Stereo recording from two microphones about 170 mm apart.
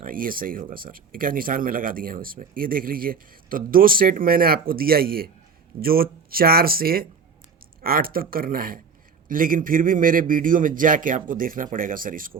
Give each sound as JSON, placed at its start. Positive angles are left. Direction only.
{"t": 0.0, "sound": "a man's voice", "side_deg": -55}